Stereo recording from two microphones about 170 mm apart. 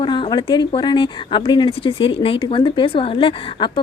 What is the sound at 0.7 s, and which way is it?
A woman's voice, 25° left (ahead or behind).